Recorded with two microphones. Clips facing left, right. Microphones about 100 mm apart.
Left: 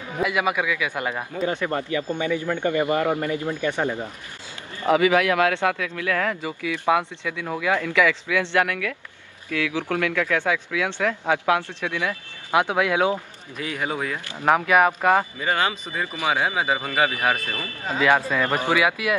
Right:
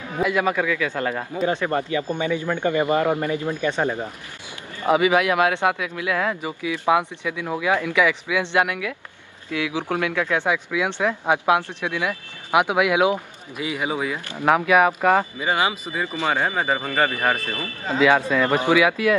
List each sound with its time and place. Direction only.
0.2 s a man's voice: 5° left (ahead or behind)
1.4 s speech: 40° right (ahead or behind)
2.0 s a man's voice: 20° right (ahead or behind)
3.4 s speech: 55° right (ahead or behind)
4.8 s a man's voice: 20° right (ahead or behind); by 15.2 s 5° left (ahead or behind)
15.3 s speech: 10° right (ahead or behind)
16.3 s speech: 5° left (ahead or behind)
17.5 s speech: 20° right (ahead or behind)
18.8 s speech: 5° left (ahead or behind)